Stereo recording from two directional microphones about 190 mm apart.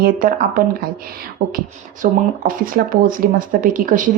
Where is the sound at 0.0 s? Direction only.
45° right (ahead or behind).